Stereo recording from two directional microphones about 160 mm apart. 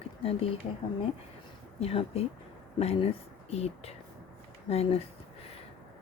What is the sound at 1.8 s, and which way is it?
Speech, 40° left (ahead or behind).